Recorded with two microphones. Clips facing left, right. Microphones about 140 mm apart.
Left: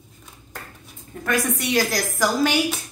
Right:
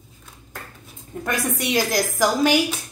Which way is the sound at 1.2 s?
20° right (ahead or behind).